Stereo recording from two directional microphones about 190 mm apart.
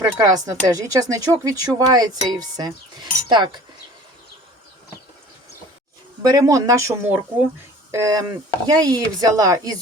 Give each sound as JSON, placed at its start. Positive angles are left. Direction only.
{"t": 0.0, "sound": "speech", "side_deg": -15}
{"t": 6.2, "sound": "speech", "side_deg": -20}